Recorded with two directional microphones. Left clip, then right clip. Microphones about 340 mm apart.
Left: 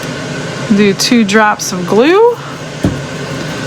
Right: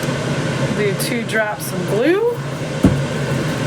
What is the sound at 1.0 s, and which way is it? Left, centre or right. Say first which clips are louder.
Speech: left 9 dB; centre.